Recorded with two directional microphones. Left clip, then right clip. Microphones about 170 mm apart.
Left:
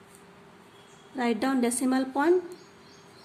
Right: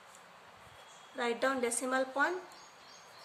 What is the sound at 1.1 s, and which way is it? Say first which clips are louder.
A woman's voice: left 5 dB; 35° left (ahead or behind).